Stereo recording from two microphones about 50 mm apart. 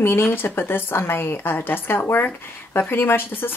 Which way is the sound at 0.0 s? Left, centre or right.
Left.